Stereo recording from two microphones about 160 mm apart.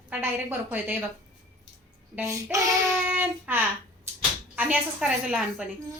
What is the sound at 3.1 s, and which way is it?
A woman's voice, 10° right (ahead or behind).